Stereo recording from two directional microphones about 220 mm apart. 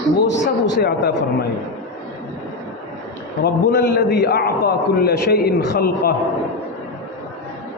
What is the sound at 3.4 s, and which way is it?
A man's voice, 45° left (ahead or behind).